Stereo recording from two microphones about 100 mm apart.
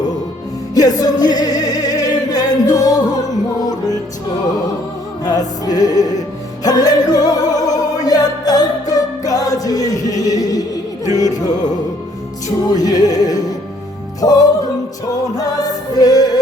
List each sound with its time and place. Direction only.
0.7 s music: 40° left (ahead or behind)
5.2 s music: 40° left (ahead or behind)
12.7 s music: 40° left (ahead or behind)